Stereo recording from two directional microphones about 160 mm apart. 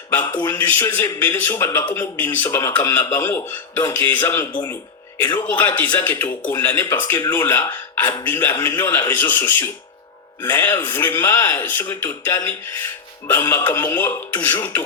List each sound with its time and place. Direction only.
0.3 s speech: 15° left (ahead or behind)